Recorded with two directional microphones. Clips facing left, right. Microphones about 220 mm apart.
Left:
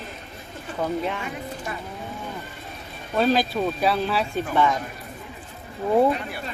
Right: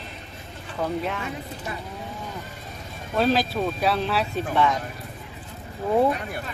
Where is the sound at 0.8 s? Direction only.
Centre (ahead or behind).